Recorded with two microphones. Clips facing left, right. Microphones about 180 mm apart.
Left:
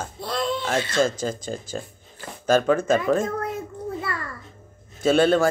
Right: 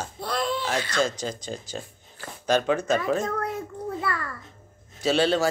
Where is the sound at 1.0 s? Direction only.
50° left (ahead or behind).